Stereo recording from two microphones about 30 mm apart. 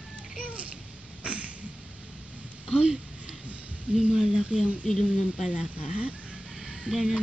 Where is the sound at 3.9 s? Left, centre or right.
Centre.